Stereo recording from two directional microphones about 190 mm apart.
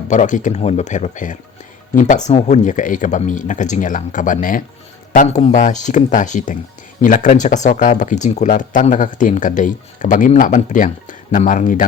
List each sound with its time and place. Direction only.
0.1 s speech: 40° left (ahead or behind)